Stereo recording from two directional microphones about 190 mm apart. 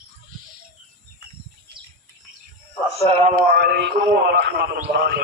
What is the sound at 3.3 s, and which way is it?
Speech, 55° right (ahead or behind).